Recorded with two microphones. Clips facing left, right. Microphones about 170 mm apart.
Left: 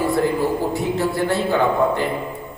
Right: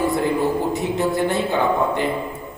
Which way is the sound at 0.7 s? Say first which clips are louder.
Even; 20° right (ahead or behind).